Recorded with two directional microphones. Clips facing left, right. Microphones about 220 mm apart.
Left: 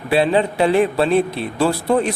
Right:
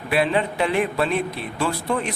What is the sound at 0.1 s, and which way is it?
A man's voice, 30° left (ahead or behind).